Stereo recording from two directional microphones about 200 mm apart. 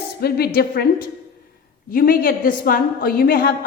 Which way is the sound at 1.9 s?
45° left (ahead or behind).